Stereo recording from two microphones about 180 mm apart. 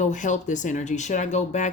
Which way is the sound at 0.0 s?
45° left (ahead or behind).